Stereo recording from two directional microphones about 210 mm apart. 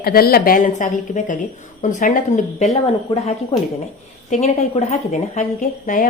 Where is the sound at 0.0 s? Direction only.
45° left (ahead or behind).